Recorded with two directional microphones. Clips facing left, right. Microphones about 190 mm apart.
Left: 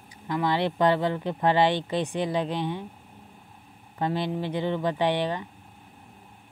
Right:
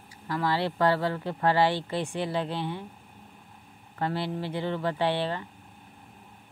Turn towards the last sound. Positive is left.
turn(degrees=15)  # may be behind; listen again after turning